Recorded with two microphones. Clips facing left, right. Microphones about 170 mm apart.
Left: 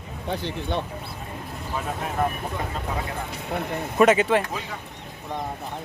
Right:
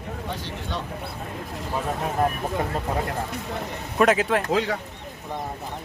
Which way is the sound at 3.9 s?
Centre (ahead or behind).